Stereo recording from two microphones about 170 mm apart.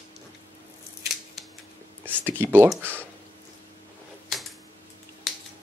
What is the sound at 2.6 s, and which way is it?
Speech, 10° right (ahead or behind).